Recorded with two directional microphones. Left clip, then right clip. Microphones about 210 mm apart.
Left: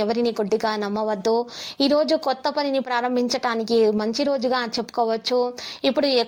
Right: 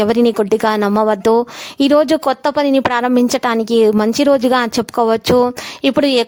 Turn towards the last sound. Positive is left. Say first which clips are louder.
# right 6 dB
turn(degrees=-35)  # may be behind; listen again after turning